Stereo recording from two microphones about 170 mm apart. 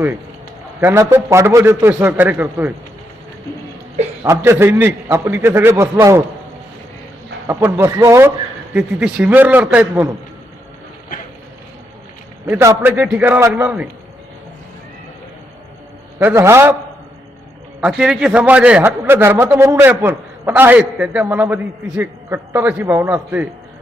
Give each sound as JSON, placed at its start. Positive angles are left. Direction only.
{"t": 0.7, "sound": "a man's voice", "side_deg": -15}
{"t": 4.2, "sound": "a man's voice", "side_deg": -15}
{"t": 7.4, "sound": "a man's voice", "side_deg": -15}
{"t": 8.7, "sound": "a man's voice", "side_deg": -5}
{"t": 12.4, "sound": "a man's voice", "side_deg": -10}
{"t": 16.2, "sound": "a man's voice", "side_deg": -15}
{"t": 17.7, "sound": "a man's voice", "side_deg": -5}